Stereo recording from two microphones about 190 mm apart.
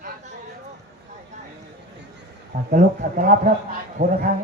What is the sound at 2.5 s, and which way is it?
A man's voice, 45° right (ahead or behind).